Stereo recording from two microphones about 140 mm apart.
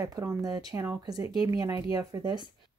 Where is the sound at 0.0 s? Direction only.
20° right (ahead or behind).